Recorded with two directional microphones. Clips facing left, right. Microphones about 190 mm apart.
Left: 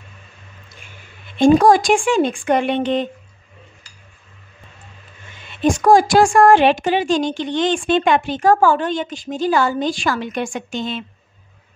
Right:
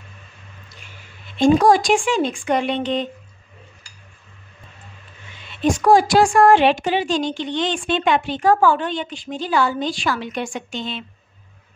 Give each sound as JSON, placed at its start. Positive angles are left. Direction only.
{"t": 1.4, "sound": "a woman's voice", "side_deg": 50}
{"t": 5.6, "sound": "a woman's voice", "side_deg": 45}